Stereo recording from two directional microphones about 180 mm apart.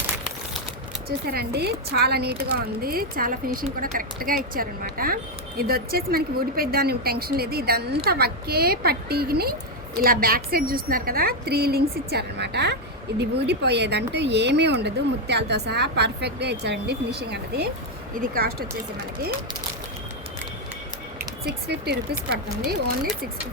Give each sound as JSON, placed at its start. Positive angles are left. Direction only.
{"t": 1.3, "sound": "speech", "side_deg": -60}
{"t": 18.1, "sound": "speech", "side_deg": -50}
{"t": 21.4, "sound": "speech", "side_deg": -65}